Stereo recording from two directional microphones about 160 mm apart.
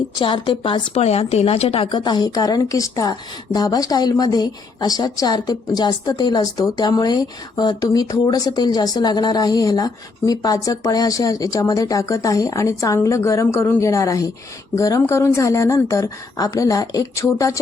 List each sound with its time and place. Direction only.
0.2 s a woman's voice: 30° left (ahead or behind)